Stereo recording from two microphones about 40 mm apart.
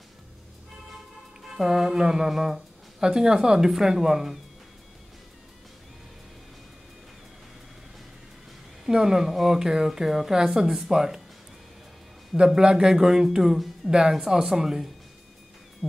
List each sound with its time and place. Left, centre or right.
1.4 s speech: centre
8.8 s speech: centre
12.4 s speech: centre
15.8 s a sound: centre